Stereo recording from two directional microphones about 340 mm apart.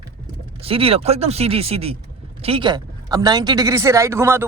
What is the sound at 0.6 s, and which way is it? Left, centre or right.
Speech, centre.